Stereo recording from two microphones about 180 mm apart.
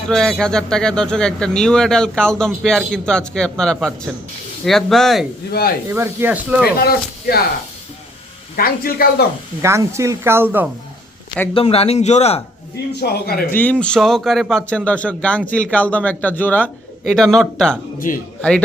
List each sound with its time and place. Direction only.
0.1 s speech: 5° left (ahead or behind)
5.5 s speech: 60° left (ahead or behind)
5.9 s speech: 10° right (ahead or behind)
6.7 s speech: 60° left (ahead or behind)
8.5 s speech: 55° left (ahead or behind)
9.6 s speech: 15° right (ahead or behind)
11.5 s speech: 35° left (ahead or behind)
13.0 s speech: 60° left (ahead or behind)
13.5 s a man's voice: 10° left (ahead or behind)
18.0 s speech: 45° left (ahead or behind)